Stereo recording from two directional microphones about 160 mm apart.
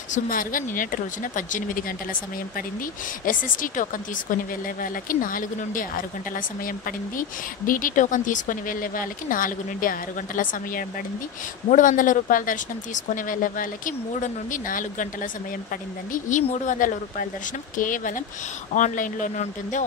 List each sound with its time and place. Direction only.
0.1 s speech: 60° left (ahead or behind)
3.3 s speech: 55° left (ahead or behind)
4.8 s speech: 60° left (ahead or behind)
16.1 s speech: 50° left (ahead or behind)